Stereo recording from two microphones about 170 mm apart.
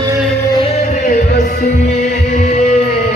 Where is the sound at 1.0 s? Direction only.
60° left (ahead or behind).